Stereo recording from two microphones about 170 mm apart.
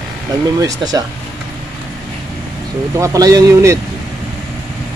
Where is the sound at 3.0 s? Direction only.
20° right (ahead or behind).